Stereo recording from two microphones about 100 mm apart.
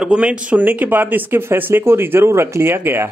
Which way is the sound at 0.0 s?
10° right (ahead or behind).